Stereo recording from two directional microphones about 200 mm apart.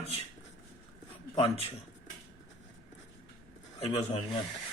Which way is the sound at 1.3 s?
30° left (ahead or behind).